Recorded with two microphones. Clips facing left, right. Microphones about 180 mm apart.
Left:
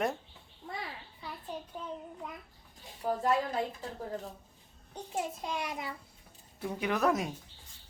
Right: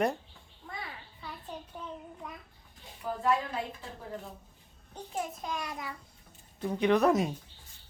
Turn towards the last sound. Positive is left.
turn(degrees=0)  # may be behind; listen again after turning